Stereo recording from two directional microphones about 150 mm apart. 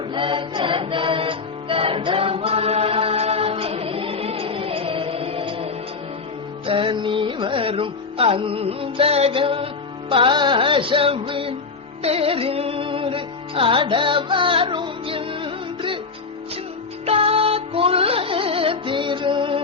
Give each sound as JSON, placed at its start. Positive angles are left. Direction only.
{"t": 0.1, "sound": "music", "side_deg": -35}
{"t": 6.7, "sound": "music", "side_deg": -35}
{"t": 17.1, "sound": "music", "side_deg": -40}